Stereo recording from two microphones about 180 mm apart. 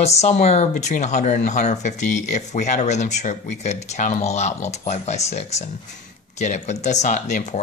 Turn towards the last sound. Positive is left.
turn(degrees=40)  # may be behind; listen again after turning